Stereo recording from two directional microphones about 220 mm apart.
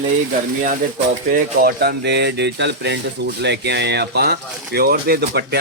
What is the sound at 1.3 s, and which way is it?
Speech, 40° right (ahead or behind).